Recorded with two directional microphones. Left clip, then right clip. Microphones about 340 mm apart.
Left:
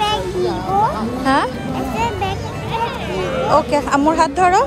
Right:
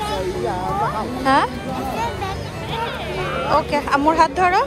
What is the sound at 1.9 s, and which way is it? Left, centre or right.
Music, left.